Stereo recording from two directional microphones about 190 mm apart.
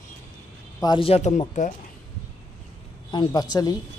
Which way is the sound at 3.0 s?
20° left (ahead or behind).